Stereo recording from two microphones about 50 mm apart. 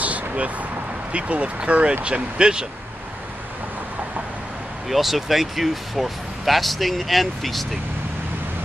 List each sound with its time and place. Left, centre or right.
0.0 s vehicle: right
1.1 s speech: right
4.8 s speech: centre